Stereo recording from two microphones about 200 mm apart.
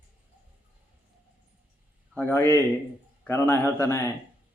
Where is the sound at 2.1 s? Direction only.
10° left (ahead or behind).